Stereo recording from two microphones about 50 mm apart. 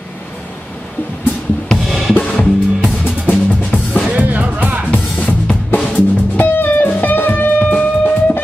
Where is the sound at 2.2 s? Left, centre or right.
Centre.